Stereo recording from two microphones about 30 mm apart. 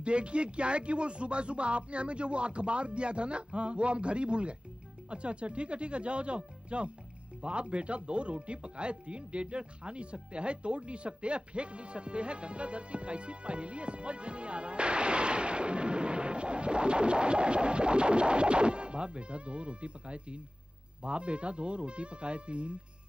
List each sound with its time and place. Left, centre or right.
0.0 s speech: right